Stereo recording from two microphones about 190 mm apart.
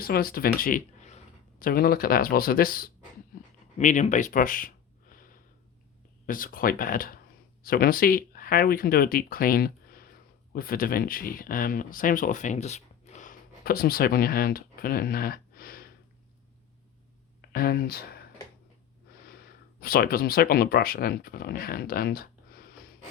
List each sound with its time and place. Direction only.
0.0 s speech: 50° left (ahead or behind)
3.3 s a sound: 45° left (ahead or behind)
3.8 s speech: 40° left (ahead or behind)
17.5 s speech: 55° left (ahead or behind)
19.8 s speech: 50° left (ahead or behind)